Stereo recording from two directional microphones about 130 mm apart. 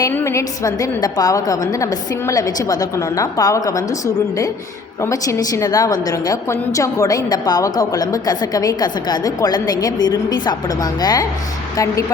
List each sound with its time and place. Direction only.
0.1 s a woman's voice: 20° left (ahead or behind)